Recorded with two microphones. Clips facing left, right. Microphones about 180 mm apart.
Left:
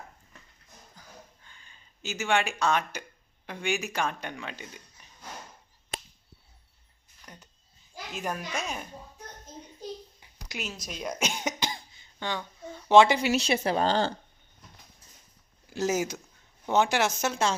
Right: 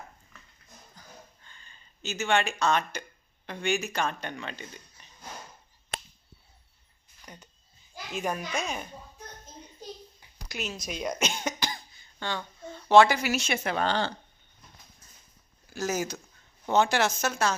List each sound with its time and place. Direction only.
0.9 s a sound: 10° left (ahead or behind)
3.4 s speech: 10° left (ahead or behind)
7.2 s a sound: centre (ahead or behind)
8.2 s speech: 5° left (ahead or behind)
10.5 s speech: 5° left (ahead or behind); by 14.1 s 40° left (ahead or behind)
15.7 s speech: 25° left (ahead or behind)